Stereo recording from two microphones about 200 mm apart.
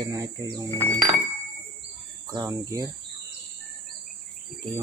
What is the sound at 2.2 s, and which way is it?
Speech, 20° right (ahead or behind).